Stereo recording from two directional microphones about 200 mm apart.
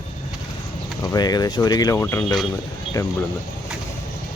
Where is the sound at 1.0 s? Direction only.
20° left (ahead or behind).